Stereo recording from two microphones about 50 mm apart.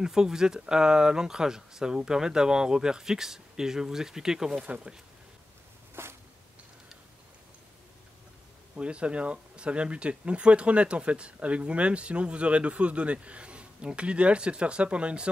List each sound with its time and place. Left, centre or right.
0.0 s speech: centre
4.6 s speech: right
6.0 s a sound: right
8.7 s speech: right